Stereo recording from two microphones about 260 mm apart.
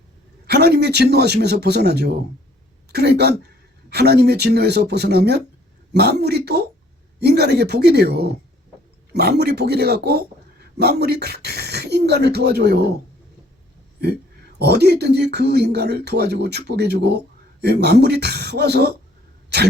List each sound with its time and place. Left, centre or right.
0.4 s speech: right
14.6 s speech: right